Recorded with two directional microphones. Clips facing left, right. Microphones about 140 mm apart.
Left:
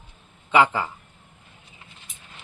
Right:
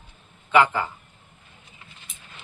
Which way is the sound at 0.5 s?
30° left (ahead or behind).